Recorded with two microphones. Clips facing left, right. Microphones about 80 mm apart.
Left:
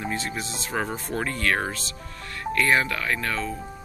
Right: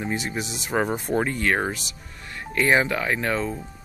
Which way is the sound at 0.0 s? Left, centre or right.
Centre.